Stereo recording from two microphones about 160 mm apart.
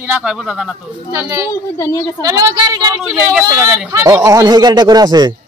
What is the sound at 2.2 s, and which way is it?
A man's voice, 25° right (ahead or behind).